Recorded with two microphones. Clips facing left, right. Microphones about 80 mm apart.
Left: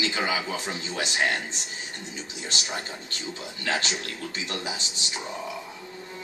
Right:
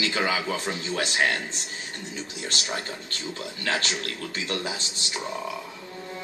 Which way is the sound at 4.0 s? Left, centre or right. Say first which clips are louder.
Right 2 dB; right.